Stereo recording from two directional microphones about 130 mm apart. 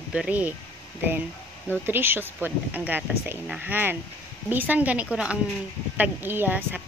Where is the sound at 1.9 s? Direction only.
15° right (ahead or behind).